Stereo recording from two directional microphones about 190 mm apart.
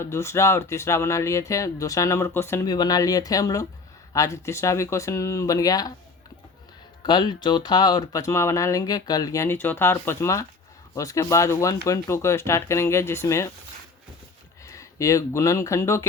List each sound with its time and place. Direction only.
0.0 s speech: 15° left (ahead or behind)
7.0 s speech: 25° left (ahead or behind)
14.6 s speech: 15° left (ahead or behind)